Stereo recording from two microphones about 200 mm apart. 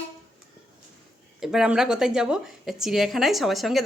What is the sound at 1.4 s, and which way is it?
A woman's voice, centre (ahead or behind).